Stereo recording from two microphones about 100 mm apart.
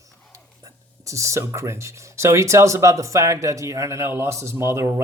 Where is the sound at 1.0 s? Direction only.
30° right (ahead or behind).